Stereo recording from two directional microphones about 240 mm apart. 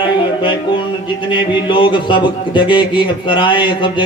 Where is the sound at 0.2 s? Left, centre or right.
Centre.